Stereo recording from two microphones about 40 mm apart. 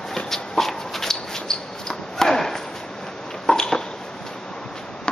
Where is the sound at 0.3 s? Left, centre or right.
Centre.